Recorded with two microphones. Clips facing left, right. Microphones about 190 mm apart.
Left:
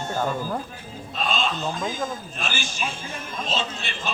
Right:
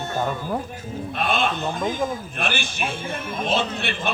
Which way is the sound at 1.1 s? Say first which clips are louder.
Right 2 dB; 60° right (ahead or behind).